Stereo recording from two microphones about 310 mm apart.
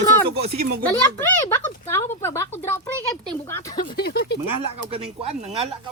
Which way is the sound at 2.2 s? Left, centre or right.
Centre.